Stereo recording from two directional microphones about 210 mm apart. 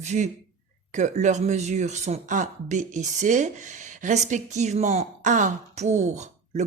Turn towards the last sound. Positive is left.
turn(degrees=-35)  # may be behind; listen again after turning